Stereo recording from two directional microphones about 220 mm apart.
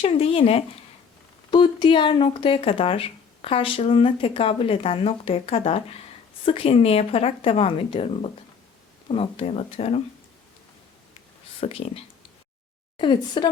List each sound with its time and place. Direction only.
0.0 s speech: 25° left (ahead or behind)
11.6 s speech: 25° left (ahead or behind)